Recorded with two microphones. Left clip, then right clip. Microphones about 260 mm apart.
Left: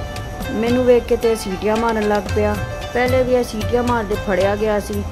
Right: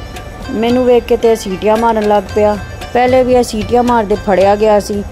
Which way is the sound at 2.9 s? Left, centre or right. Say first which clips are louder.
Right 7 dB; right.